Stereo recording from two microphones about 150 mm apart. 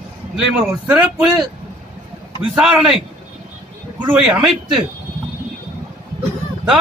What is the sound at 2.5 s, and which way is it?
Speech, 5° right (ahead or behind).